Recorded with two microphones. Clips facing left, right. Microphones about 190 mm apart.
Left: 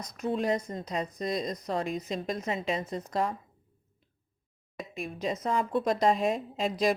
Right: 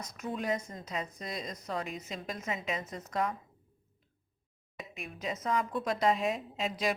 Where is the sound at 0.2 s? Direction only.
30° left (ahead or behind).